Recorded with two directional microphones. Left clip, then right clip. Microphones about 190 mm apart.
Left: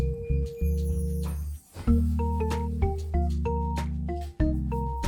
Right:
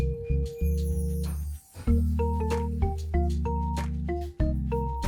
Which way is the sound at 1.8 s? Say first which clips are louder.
Even; centre (ahead or behind).